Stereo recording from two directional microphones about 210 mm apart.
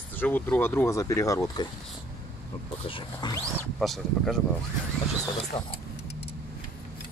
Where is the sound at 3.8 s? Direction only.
Centre (ahead or behind).